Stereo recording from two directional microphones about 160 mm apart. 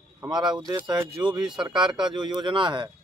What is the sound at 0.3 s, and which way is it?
Speech, 30° right (ahead or behind).